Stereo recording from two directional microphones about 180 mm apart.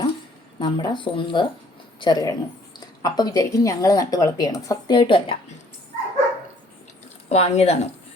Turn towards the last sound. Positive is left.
turn(degrees=35)  # may be behind; listen again after turning